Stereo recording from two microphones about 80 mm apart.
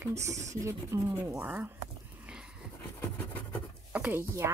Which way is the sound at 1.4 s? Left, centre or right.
Right.